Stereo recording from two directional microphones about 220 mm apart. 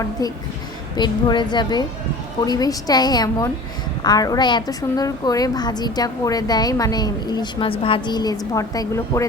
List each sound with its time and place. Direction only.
0.9 s a woman's voice: 20° left (ahead or behind)